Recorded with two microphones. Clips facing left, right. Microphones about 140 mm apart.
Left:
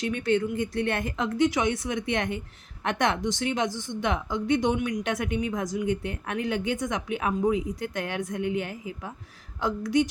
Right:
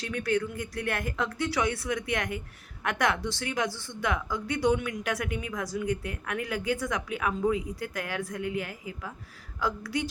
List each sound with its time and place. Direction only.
0.0 s a woman's voice: 25° left (ahead or behind)